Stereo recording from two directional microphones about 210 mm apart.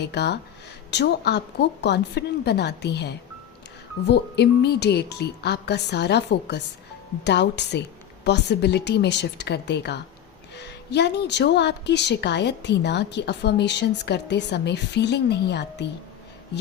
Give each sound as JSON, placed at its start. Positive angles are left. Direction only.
{"t": 0.0, "sound": "a woman's voice", "side_deg": 55}